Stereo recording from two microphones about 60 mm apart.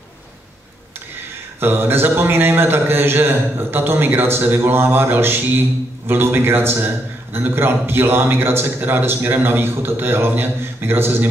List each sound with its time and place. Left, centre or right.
1.6 s a man's voice: right